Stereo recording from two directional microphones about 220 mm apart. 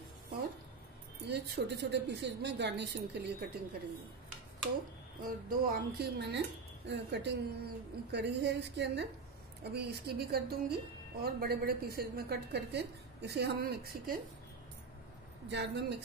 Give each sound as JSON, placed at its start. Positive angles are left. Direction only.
{"t": 1.2, "sound": "a woman's voice", "side_deg": -50}
{"t": 5.2, "sound": "a woman's voice", "side_deg": -45}
{"t": 15.4, "sound": "a woman's voice", "side_deg": -50}